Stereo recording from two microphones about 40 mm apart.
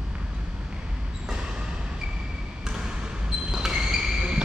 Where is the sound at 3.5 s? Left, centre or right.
Centre.